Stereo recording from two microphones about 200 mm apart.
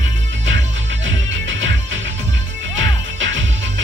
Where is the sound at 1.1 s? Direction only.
70° right (ahead or behind).